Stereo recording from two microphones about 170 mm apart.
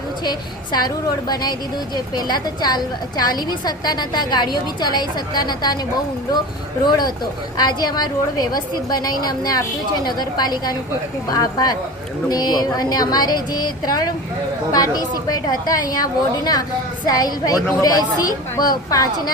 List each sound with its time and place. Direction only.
0.3 s a woman's voice: 25° left (ahead or behind)
6.8 s a woman's voice: 25° left (ahead or behind)